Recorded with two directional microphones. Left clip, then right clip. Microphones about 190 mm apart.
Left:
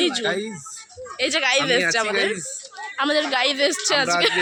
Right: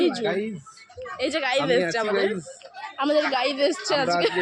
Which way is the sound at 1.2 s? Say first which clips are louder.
Left 4 dB; 15° left (ahead or behind).